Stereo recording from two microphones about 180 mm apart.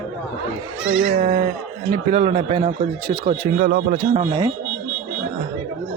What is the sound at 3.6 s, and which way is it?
Speech, 55° right (ahead or behind).